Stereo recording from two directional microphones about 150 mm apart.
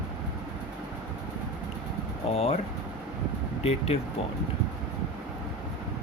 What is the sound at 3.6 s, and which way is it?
Speech, 45° left (ahead or behind).